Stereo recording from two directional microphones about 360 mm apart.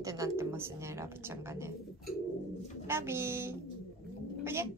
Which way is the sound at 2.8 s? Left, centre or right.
Centre.